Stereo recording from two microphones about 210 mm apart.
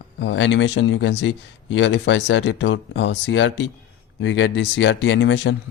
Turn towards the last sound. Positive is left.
turn(degrees=60)  # may be behind; listen again after turning